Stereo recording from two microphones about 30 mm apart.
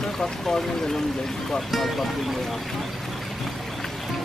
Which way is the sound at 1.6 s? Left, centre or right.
Centre.